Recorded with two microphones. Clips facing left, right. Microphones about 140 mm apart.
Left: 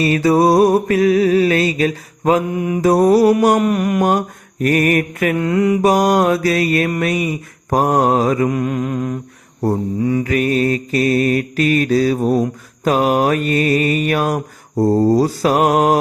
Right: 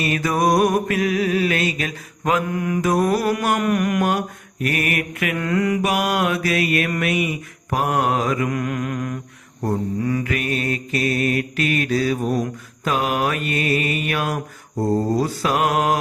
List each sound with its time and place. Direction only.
0.0 s mantra: 30° left (ahead or behind)
2.5 s mantra: 25° left (ahead or behind)
2.9 s mantra: 35° left (ahead or behind)
3.5 s mantra: 25° left (ahead or behind)
4.6 s mantra: 40° left (ahead or behind)
5.4 s mantra: 25° left (ahead or behind)
5.9 s mantra: 40° left (ahead or behind)
8.4 s mantra: 25° left (ahead or behind)
10.3 s mantra: 40° left (ahead or behind)